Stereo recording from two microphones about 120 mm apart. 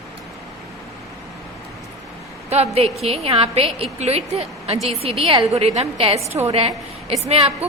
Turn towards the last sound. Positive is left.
turn(degrees=-60)  # may be behind; listen again after turning